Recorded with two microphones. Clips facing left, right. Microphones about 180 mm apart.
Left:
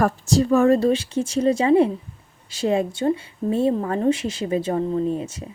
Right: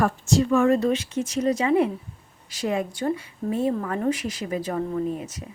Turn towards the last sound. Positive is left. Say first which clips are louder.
# left 4 dB
turn(degrees=25)  # may be behind; listen again after turning